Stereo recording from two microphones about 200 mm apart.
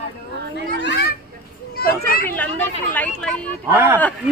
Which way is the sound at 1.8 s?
50° left (ahead or behind).